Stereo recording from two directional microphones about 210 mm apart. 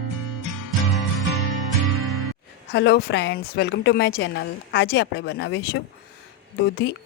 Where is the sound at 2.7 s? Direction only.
50° left (ahead or behind).